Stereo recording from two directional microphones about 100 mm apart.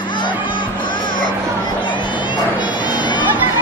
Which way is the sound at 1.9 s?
50° left (ahead or behind).